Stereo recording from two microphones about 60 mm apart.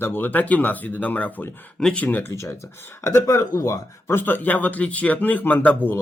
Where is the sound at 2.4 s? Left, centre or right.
Left.